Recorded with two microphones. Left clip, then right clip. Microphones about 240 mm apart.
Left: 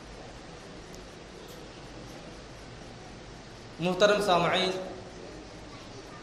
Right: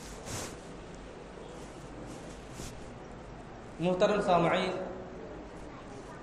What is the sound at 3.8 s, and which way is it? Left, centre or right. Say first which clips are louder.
Speech: left 4 dB; left.